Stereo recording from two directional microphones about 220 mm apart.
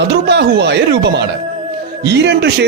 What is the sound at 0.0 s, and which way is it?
A man's voice, 50° right (ahead or behind).